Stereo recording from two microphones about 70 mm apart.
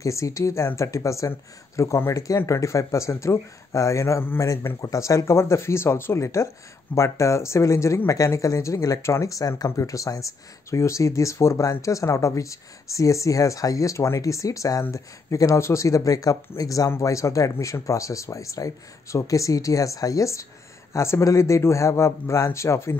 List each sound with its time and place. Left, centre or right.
0.0 s speech: left